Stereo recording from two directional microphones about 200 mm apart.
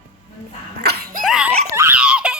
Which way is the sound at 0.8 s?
55° right (ahead or behind).